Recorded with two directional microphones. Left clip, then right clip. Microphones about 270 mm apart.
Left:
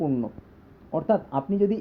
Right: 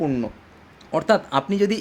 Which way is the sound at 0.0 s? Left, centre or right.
Centre.